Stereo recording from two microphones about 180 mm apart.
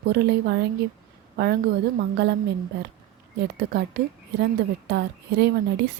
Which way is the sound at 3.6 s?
65° right (ahead or behind).